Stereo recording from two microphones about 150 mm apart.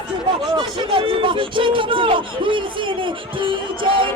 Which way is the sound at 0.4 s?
30° right (ahead or behind).